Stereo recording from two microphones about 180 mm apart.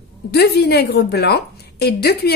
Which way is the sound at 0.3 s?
60° left (ahead or behind).